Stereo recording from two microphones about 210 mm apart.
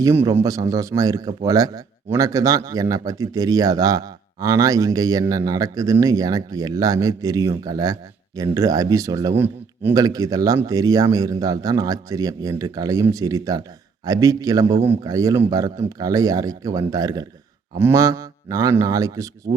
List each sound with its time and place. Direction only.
0.0 s a man's voice: 15° right (ahead or behind)